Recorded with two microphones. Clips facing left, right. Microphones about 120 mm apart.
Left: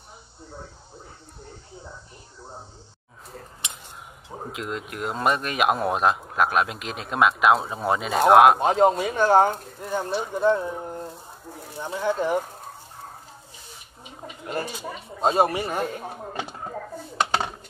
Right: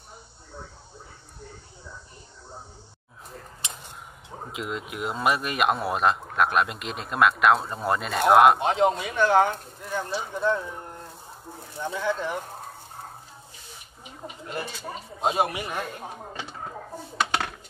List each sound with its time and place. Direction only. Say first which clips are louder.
4.5 s speech: left 1 dB; centre (ahead or behind)
8.5 s speech: left 3 dB; 45° left (ahead or behind)
11.9 s speech: left 4 dB; 45° left (ahead or behind)
14.5 s speech: left 4 dB; 45° left (ahead or behind)
16.1 s a sound: left 4 dB; 50° left (ahead or behind)
17.2 s dishes: left 2 dB; 20° left (ahead or behind)